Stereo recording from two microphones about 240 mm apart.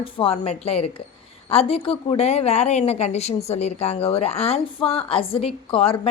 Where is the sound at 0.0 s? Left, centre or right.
Left.